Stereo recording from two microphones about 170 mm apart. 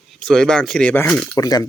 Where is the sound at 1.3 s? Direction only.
20° left (ahead or behind).